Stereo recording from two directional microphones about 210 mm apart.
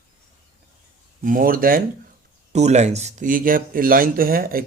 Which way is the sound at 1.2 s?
40° right (ahead or behind).